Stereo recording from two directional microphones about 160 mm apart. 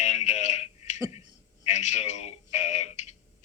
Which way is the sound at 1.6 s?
45° left (ahead or behind).